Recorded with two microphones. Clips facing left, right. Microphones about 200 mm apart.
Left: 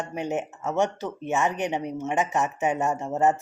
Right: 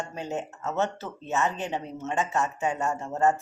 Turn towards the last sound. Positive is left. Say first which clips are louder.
# left 2 dB
turn(degrees=20)  # may be behind; listen again after turning